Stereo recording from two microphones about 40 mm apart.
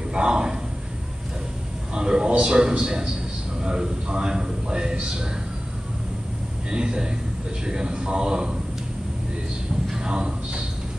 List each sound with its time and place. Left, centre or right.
0.1 s a sound: right
2.0 s a man's voice: centre
6.7 s a man's voice: right
9.8 s a man's voice: centre